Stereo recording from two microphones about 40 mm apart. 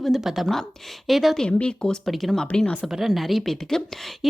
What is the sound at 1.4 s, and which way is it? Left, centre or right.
Speech, left.